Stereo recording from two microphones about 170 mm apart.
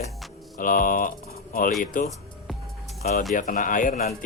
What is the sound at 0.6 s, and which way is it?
Speech, 55° left (ahead or behind).